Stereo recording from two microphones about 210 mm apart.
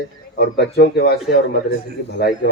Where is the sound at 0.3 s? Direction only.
50° left (ahead or behind).